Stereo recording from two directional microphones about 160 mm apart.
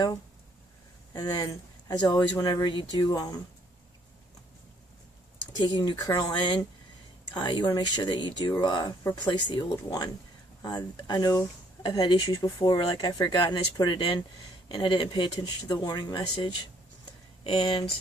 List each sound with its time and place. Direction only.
1.1 s speech: 25° left (ahead or behind)
5.6 s speech: 30° left (ahead or behind)
17.4 s speech: 35° left (ahead or behind)